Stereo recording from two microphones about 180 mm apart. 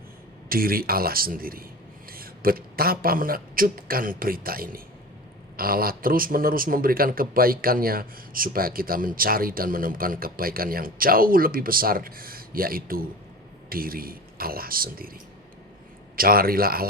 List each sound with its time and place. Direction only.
0.4 s a man's voice: 55° right (ahead or behind)
16.1 s speech: 55° right (ahead or behind)